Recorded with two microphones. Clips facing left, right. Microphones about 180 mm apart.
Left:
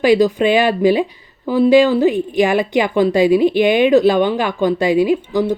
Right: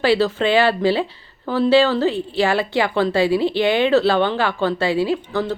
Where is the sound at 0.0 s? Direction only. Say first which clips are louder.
Left 5 dB; 15° left (ahead or behind).